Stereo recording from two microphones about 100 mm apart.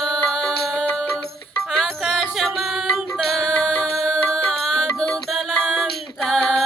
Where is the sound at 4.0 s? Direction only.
5° left (ahead or behind).